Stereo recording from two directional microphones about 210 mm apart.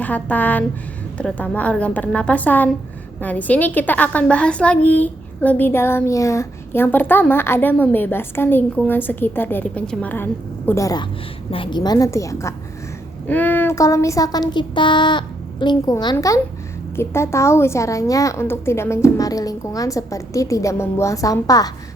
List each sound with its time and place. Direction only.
0.0 s a woman's voice: 5° left (ahead or behind)